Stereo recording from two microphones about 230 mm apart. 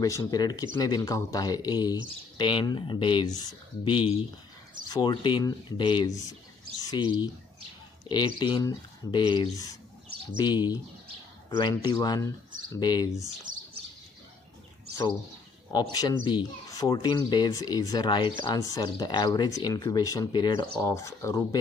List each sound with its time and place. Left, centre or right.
0.0 s speech: centre
13.5 s bird: right
15.7 s speech: centre